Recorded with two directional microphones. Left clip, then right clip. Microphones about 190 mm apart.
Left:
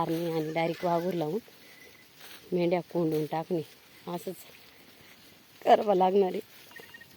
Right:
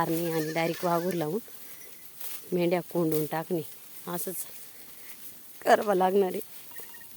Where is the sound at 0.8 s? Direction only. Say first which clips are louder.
Right 1 dB; 35° right (ahead or behind).